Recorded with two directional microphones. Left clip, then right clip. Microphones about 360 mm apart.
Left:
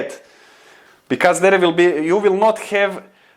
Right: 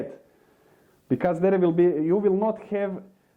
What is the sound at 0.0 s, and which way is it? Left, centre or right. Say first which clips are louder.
Speech: left 9 dB; centre.